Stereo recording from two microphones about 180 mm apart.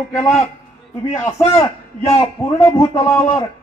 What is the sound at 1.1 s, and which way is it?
A man's voice, 15° left (ahead or behind).